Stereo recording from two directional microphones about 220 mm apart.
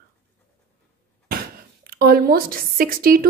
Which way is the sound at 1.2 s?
45° right (ahead or behind).